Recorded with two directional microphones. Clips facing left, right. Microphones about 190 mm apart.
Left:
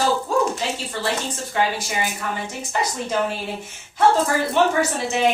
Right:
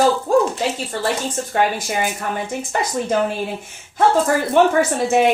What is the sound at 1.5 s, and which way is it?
A woman's voice, 50° right (ahead or behind).